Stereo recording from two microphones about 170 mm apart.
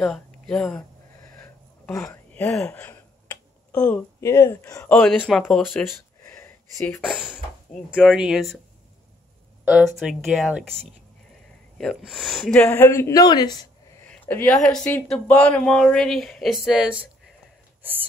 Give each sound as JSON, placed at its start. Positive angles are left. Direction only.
{"t": 0.0, "sound": "speech", "side_deg": 0}
{"t": 1.9, "sound": "speech", "side_deg": 15}
{"t": 6.2, "sound": "a sound", "side_deg": 15}
{"t": 7.0, "sound": "speech", "side_deg": 0}
{"t": 9.7, "sound": "speech", "side_deg": -5}
{"t": 12.6, "sound": "speech", "side_deg": 15}
{"t": 14.0, "sound": "a sound", "side_deg": 10}
{"t": 14.6, "sound": "speech", "side_deg": 5}